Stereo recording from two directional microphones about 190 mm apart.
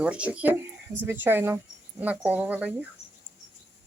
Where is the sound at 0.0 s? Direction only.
5° right (ahead or behind).